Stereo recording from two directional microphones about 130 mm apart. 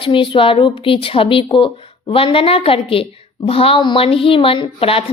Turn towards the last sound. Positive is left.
turn(degrees=45)  # may be behind; listen again after turning